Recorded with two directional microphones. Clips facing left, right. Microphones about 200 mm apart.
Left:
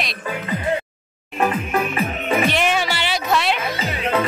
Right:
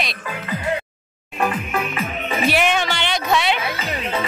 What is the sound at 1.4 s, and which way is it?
Music, 25° left (ahead or behind).